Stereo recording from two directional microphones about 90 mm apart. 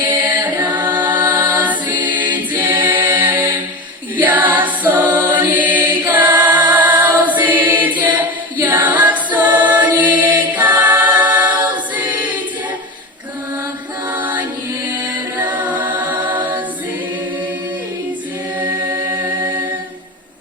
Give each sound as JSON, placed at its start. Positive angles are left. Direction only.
{"t": 0.0, "sound": "music", "side_deg": -20}
{"t": 3.0, "sound": "a capella", "side_deg": -20}
{"t": 4.2, "sound": "choir", "side_deg": -20}
{"t": 14.1, "sound": "music", "side_deg": -20}
{"t": 18.6, "sound": "mantra", "side_deg": -60}
{"t": 19.1, "sound": "music", "side_deg": -55}